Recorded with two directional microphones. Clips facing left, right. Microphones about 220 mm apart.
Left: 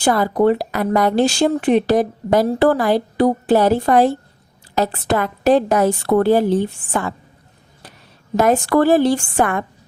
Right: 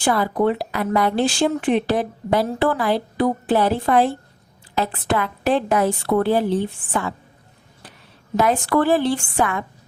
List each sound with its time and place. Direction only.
0.0 s a woman's voice: 40° left (ahead or behind)
8.4 s a woman's voice: 45° left (ahead or behind)